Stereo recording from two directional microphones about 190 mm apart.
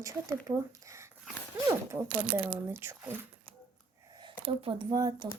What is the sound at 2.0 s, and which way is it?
Speech, 30° right (ahead or behind).